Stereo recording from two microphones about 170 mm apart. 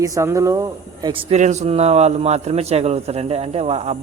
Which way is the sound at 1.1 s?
30° right (ahead or behind).